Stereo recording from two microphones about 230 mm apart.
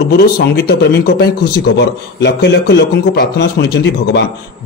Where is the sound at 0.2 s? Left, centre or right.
Left.